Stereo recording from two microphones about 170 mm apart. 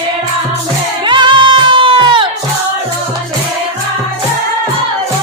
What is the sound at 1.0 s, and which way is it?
Music, 30° right (ahead or behind).